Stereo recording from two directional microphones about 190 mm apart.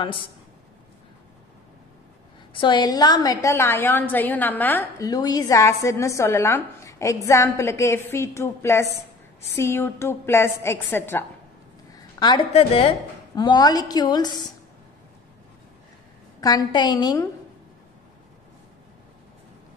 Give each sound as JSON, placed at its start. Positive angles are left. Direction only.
{"t": 0.0, "sound": "a woman's voice", "side_deg": 25}
{"t": 2.5, "sound": "a woman's voice", "side_deg": 25}
{"t": 11.9, "sound": "a woman's voice", "side_deg": 20}
{"t": 16.3, "sound": "a woman's voice", "side_deg": 20}